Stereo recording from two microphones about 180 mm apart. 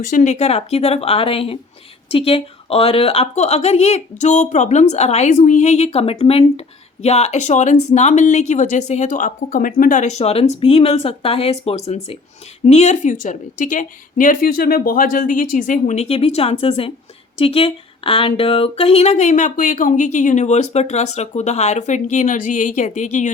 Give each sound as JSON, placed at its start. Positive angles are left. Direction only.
{"t": 0.0, "sound": "a woman's voice", "side_deg": 45}